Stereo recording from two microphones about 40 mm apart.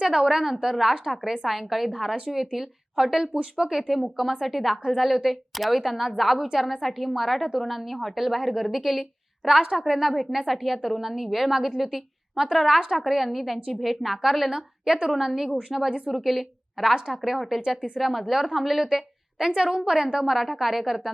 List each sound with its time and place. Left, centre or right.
0.0 s a woman's voice: centre
4.2 s a woman's voice: centre
12.8 s a woman's voice: centre
13.1 s a woman's voice: centre
18.9 s a woman's voice: centre